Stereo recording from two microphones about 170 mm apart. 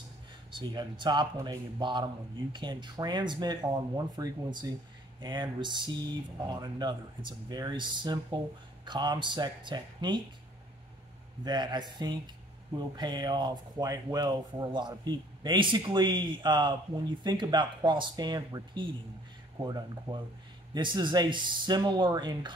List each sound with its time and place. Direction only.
0.5 s speech: 25° right (ahead or behind)
11.4 s speech: 25° right (ahead or behind)